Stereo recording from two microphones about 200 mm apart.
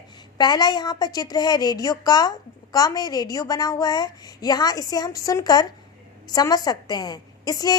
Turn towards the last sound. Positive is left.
turn(degrees=20)  # may be behind; listen again after turning